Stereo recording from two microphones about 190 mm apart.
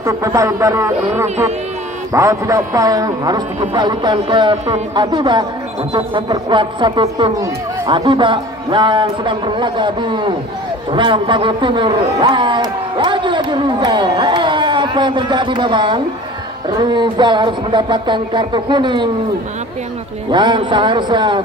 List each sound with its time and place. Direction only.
0.0 s a man's voice: 15° right (ahead or behind)
20.2 s a man's voice: 25° right (ahead or behind)